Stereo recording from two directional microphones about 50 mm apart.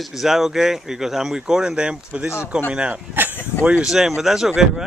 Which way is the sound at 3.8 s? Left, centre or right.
Centre.